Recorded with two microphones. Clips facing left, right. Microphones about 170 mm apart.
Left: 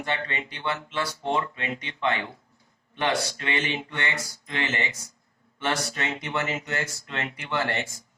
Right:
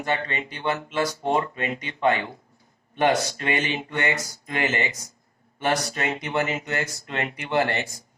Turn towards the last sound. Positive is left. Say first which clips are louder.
# right 5 dB
turn(degrees=-40)  # may be behind; listen again after turning